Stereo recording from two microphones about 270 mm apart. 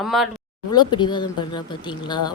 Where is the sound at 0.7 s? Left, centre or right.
Centre.